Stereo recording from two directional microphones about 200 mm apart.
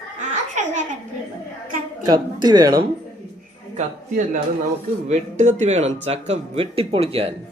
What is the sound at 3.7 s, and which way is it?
A man's voice, 40° right (ahead or behind).